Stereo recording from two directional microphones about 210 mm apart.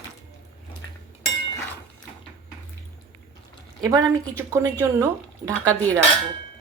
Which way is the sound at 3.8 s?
15° right (ahead or behind).